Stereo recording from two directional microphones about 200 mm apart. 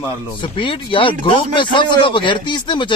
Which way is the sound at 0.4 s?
25° left (ahead or behind).